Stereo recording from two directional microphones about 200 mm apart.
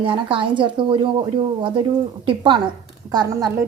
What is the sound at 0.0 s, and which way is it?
Speech, 25° right (ahead or behind).